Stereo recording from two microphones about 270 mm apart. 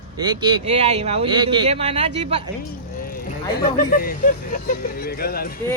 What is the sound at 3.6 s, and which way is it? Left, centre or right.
Speech, left.